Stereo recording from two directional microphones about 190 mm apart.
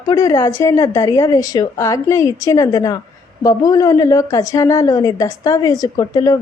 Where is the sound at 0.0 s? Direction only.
20° left (ahead or behind).